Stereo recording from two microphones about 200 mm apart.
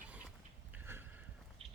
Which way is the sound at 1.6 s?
30° right (ahead or behind).